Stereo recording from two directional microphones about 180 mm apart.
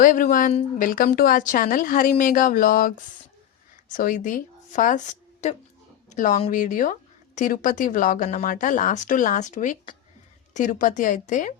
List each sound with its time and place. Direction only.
0.0 s speech: 50° left (ahead or behind)